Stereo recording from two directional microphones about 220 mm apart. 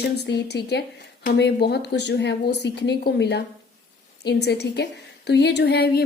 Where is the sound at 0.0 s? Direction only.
50° left (ahead or behind).